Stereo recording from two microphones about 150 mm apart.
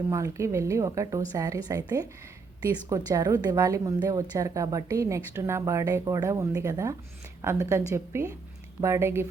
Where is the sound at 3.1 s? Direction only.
25° right (ahead or behind).